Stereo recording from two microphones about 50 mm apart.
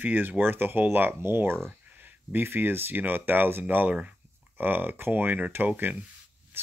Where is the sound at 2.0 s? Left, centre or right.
Right.